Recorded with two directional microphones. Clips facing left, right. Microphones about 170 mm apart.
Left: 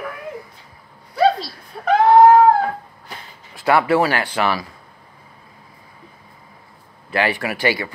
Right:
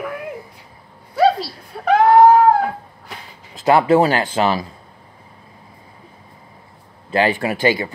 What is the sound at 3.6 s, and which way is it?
Speech, 25° right (ahead or behind).